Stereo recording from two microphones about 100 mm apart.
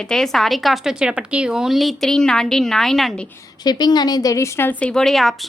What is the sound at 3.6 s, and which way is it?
A woman's voice, 45° left (ahead or behind).